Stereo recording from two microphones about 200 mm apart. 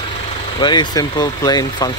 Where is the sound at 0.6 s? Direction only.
20° left (ahead or behind).